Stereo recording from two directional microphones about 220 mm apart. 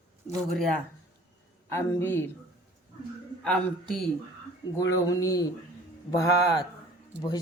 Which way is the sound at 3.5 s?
5° left (ahead or behind).